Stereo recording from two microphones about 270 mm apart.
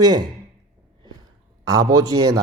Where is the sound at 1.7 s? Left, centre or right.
Centre.